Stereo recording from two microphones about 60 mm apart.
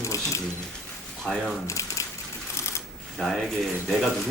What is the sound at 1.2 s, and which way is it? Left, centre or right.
Speech, centre.